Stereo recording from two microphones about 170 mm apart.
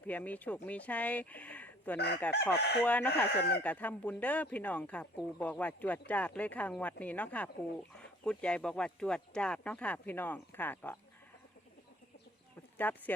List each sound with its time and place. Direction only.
0.1 s speech: 10° left (ahead or behind)
2.3 s chicken: 75° left (ahead or behind)
2.8 s speech: 10° left (ahead or behind)
3.2 s chicken: 70° left (ahead or behind)
3.6 s speech: 10° left (ahead or behind)
12.7 s speech: 10° left (ahead or behind)